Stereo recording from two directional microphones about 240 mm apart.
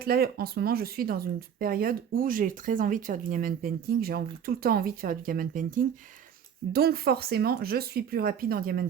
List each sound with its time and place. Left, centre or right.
0.0 s speech: right